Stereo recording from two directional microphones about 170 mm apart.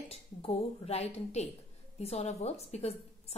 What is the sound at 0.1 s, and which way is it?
A woman's voice, 35° left (ahead or behind).